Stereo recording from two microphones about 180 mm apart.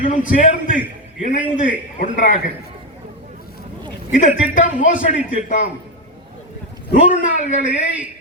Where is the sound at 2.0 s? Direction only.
50° left (ahead or behind).